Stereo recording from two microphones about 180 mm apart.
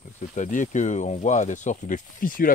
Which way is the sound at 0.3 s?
45° left (ahead or behind).